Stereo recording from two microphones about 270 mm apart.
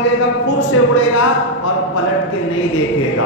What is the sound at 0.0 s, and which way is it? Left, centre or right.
A man's voice, left.